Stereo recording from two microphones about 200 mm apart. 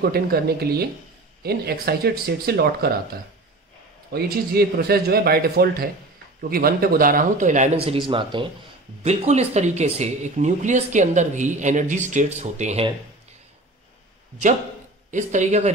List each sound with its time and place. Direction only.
0.0 s a man's voice: 50° right (ahead or behind)
4.1 s a man's voice: 50° right (ahead or behind); by 12.9 s 35° right (ahead or behind)
15.0 s speech: 40° right (ahead or behind)